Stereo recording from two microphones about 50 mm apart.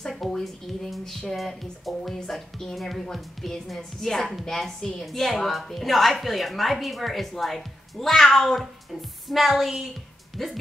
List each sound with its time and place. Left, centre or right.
0.3 s a woman's voice: centre